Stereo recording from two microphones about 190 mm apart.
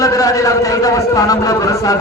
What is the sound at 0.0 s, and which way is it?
Speech, 20° left (ahead or behind).